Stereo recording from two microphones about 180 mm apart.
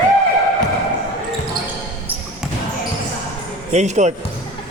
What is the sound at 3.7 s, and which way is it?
Speech, 40° right (ahead or behind).